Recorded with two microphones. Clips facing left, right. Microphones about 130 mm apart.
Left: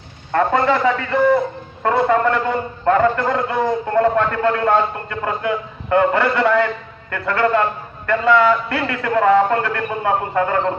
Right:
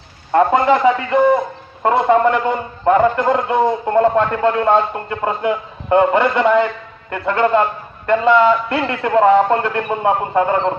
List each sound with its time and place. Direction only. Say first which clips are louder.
0.3 s a man's voice: right 3 dB; 20° right (ahead or behind)